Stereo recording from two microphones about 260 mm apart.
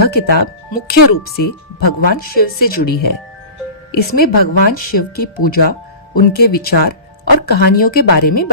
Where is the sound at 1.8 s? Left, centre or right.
Left.